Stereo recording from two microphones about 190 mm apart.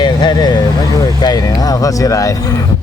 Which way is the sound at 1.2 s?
20° left (ahead or behind).